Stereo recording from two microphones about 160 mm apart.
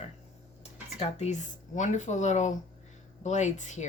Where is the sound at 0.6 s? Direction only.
40° left (ahead or behind).